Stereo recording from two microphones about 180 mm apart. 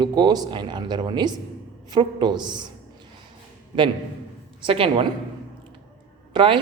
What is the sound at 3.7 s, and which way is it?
A woman's voice, 25° right (ahead or behind).